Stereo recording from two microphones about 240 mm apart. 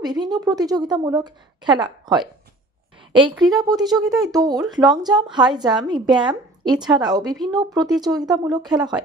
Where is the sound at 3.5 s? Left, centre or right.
Centre.